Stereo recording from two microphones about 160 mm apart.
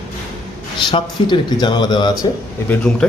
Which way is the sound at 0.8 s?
30° left (ahead or behind).